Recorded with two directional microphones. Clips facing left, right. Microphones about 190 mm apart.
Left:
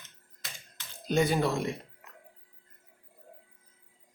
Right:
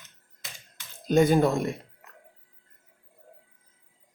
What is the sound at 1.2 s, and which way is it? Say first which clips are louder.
Speech: right 8 dB; 50° right (ahead or behind).